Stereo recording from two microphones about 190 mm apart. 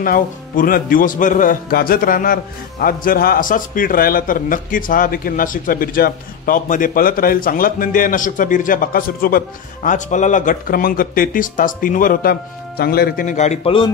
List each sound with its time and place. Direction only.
0.0 s a man's voice: 50° left (ahead or behind)